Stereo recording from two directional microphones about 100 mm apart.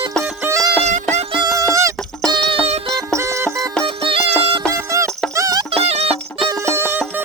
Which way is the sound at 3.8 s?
65° right (ahead or behind).